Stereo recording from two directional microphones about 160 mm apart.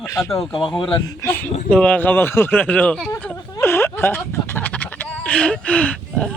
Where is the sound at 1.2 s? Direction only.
15° left (ahead or behind).